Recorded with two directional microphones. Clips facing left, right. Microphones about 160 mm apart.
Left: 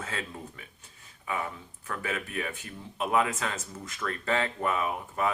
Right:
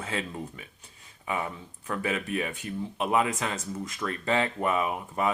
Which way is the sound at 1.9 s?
20° right (ahead or behind).